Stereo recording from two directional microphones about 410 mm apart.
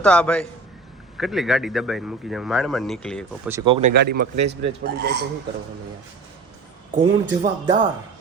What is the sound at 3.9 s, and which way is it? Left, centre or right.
Speech, right.